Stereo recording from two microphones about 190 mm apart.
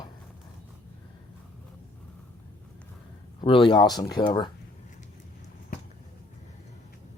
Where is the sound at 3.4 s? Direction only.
25° left (ahead or behind).